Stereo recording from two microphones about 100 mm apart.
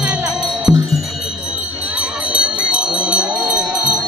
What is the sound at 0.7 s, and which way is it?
Wind chime, 15° right (ahead or behind).